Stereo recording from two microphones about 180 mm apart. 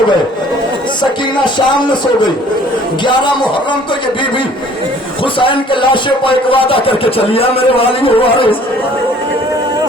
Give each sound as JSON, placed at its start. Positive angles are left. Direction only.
{"t": 1.5, "sound": "speech", "side_deg": 25}
{"t": 5.2, "sound": "speech", "side_deg": 30}